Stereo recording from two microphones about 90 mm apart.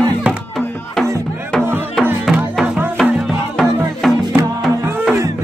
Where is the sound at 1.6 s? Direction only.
25° right (ahead or behind).